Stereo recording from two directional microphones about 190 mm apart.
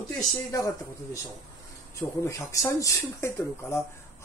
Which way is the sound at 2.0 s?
15° left (ahead or behind).